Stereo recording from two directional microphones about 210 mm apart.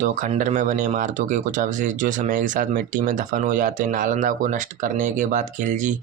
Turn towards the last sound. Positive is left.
turn(degrees=-35)  # may be behind; listen again after turning